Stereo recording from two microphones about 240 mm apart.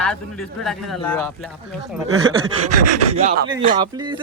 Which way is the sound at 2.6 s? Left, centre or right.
Right.